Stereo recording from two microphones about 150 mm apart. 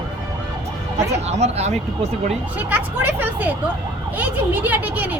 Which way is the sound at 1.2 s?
45° right (ahead or behind).